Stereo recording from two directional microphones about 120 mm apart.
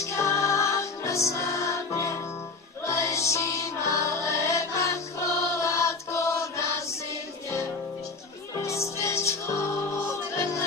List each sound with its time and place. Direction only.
0.1 s music: 25° left (ahead or behind)
8.5 s music: 25° left (ahead or behind)